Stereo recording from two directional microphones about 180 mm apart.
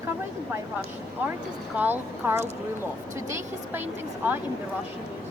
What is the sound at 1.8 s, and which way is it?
Speech, 10° right (ahead or behind).